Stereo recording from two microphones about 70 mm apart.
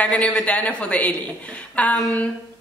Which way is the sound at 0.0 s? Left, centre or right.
Centre.